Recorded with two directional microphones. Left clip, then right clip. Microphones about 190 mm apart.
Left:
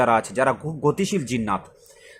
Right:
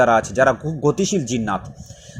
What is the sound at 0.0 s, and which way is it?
Speech, centre (ahead or behind).